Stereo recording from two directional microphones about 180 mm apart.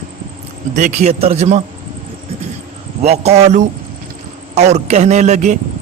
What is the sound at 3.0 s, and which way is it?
A man's voice, 35° right (ahead or behind).